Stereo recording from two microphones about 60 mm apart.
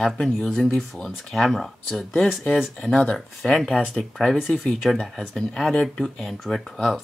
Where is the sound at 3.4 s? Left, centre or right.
Centre.